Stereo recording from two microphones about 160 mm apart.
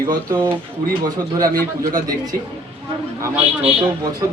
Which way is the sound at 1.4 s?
60° right (ahead or behind).